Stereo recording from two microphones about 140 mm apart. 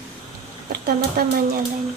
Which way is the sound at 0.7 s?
90° right.